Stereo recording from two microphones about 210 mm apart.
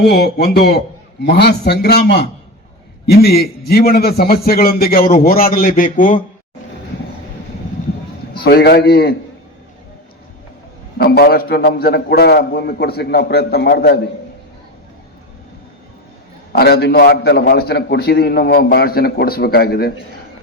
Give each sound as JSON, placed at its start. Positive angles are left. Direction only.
{"t": 0.0, "sound": "a man's voice", "side_deg": 50}
{"t": 8.3, "sound": "a man's voice", "side_deg": 45}
{"t": 10.9, "sound": "a man's voice", "side_deg": 50}
{"t": 16.5, "sound": "a man's voice", "side_deg": 50}